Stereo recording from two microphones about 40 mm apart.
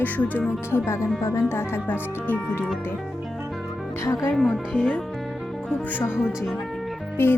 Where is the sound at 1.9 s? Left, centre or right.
Left.